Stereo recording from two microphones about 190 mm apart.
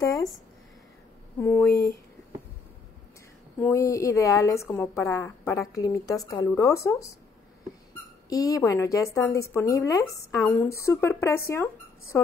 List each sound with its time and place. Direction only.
1.4 s speech: 15° left (ahead or behind)
3.5 s speech: 10° left (ahead or behind)
8.3 s speech: 20° left (ahead or behind)